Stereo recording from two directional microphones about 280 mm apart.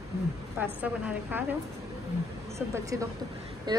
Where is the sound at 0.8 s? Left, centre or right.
Centre.